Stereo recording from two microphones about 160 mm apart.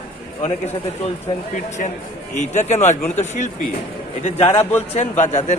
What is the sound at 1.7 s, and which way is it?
A man's voice, 50° left (ahead or behind).